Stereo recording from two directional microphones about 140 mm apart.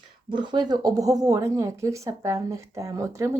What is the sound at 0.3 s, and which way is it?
Speech, 35° right (ahead or behind).